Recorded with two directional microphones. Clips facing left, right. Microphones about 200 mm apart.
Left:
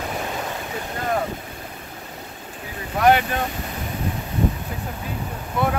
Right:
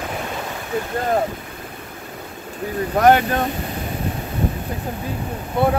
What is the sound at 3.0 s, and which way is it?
Speech, 45° right (ahead or behind).